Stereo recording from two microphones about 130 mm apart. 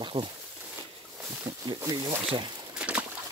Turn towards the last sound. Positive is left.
turn(degrees=-10)  # may be behind; listen again after turning